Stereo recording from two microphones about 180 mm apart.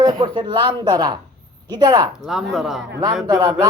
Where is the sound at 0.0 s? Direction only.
25° right (ahead or behind).